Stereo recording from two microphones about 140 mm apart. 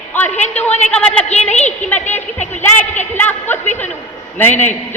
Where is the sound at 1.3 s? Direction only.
50° left (ahead or behind).